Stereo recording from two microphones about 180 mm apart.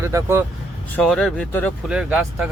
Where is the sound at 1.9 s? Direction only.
5° right (ahead or behind).